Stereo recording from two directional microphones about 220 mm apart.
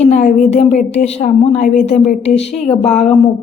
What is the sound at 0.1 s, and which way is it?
A woman's voice, 35° left (ahead or behind).